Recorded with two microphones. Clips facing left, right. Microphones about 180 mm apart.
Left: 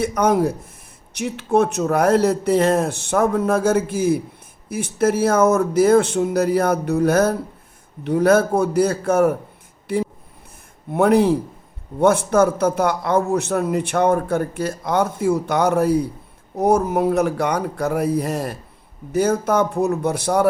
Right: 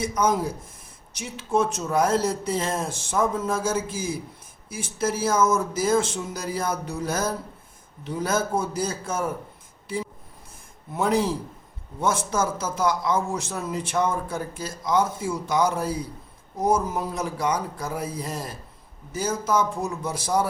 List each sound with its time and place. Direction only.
0.0 s a man's voice: 65° left (ahead or behind)
9.8 s a sound: 65° left (ahead or behind)
10.9 s a man's voice: 60° left (ahead or behind)